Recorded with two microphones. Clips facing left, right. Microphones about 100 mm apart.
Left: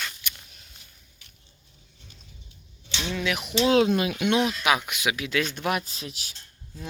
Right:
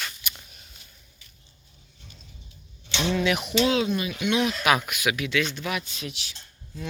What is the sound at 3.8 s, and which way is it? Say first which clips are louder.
Speech: left 3 dB; 85° left.